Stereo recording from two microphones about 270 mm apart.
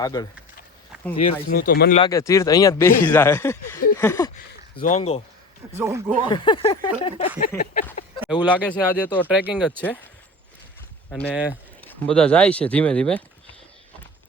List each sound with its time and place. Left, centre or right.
0.0 s speech: centre
1.5 s speech: left
2.0 s speech: centre
3.9 s a sound: centre
4.8 s speech: left
5.7 s a man's voice: centre
6.2 s speech: centre
7.4 s speech: left
8.5 s speech: centre
11.1 s speech: centre